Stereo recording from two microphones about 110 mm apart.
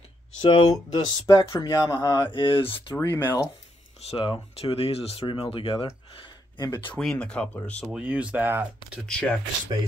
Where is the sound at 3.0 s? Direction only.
35° left (ahead or behind).